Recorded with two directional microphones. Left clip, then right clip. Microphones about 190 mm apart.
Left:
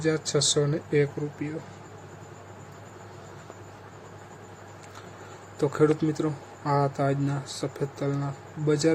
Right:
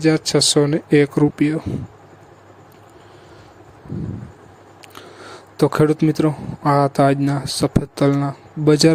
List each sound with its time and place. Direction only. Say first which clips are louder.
0.0 s speech: right 9 dB; 45° right (ahead or behind)
5.5 s speech: right 7 dB; 50° right (ahead or behind)